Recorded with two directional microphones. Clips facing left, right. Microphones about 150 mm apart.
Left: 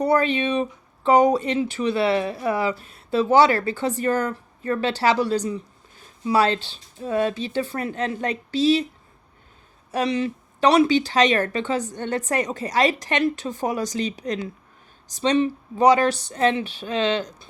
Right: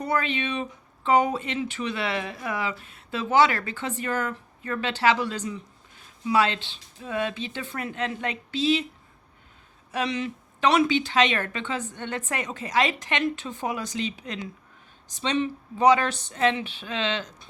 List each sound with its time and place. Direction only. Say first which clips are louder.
0.0 s speech: left 7 dB; 35° left (ahead or behind)
9.9 s speech: left 5 dB; 35° left (ahead or behind)